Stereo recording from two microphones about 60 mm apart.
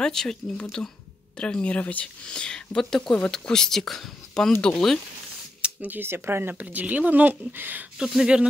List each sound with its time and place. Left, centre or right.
0.0 s speech: centre
5.6 s speech: right
6.6 s speech: right
8.0 s speech: centre